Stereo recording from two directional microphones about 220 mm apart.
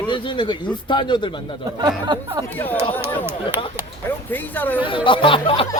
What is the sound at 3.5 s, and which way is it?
Speech, 10° right (ahead or behind).